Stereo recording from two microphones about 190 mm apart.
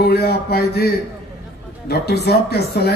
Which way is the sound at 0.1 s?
55° left (ahead or behind).